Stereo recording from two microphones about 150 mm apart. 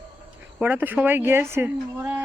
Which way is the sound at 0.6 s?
15° right (ahead or behind).